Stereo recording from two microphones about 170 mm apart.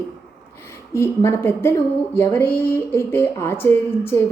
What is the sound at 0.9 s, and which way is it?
Speech, 15° left (ahead or behind).